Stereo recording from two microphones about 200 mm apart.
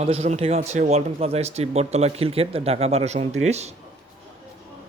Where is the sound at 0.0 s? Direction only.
30° right (ahead or behind).